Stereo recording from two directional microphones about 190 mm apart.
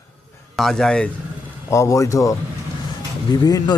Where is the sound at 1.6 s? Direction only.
15° left (ahead or behind).